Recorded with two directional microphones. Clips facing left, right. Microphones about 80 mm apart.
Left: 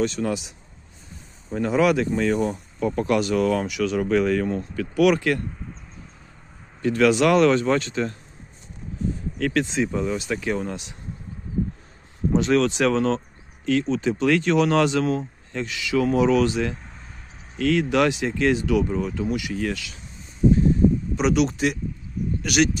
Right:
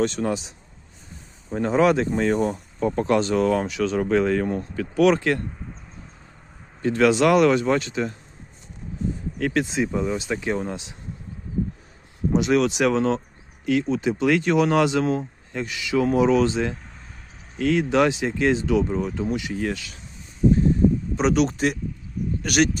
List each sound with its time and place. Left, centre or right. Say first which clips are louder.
0.0 s speech: right 1 dB; right
0.3 s speech: right 1 dB; right
6.8 s speech: even; right
9.4 s speech: even; centre
12.3 s speech: even; centre
21.2 s speech: right 1 dB; right